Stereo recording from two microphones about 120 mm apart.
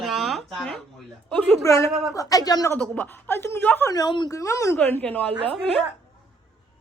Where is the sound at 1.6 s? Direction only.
25° left (ahead or behind).